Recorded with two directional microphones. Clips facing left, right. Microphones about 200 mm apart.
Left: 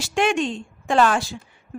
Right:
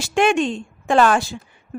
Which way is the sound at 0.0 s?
55° right (ahead or behind).